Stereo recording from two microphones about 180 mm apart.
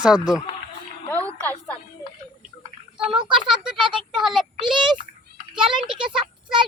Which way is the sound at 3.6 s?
5° right (ahead or behind).